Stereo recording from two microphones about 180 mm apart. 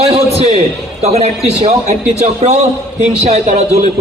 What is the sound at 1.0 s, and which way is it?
A man's voice, 35° right (ahead or behind).